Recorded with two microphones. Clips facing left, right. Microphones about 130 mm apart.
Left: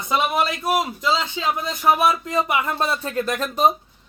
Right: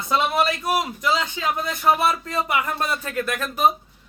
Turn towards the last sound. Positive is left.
turn(degrees=30)  # may be behind; listen again after turning